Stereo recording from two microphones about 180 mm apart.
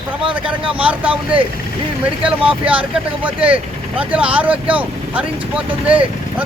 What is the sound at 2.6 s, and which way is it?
Speech, 10° right (ahead or behind).